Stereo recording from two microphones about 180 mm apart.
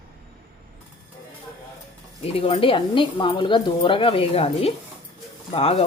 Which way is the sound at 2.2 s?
30° left (ahead or behind).